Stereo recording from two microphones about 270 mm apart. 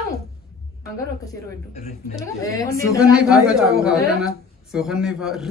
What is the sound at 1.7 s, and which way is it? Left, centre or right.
Speech, left.